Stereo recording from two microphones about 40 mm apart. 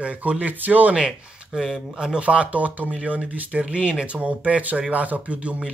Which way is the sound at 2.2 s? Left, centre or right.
Right.